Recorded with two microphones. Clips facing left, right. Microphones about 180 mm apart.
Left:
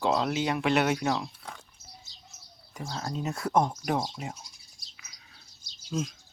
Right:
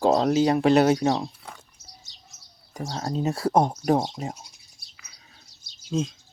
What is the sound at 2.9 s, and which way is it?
Speech, 35° right (ahead or behind).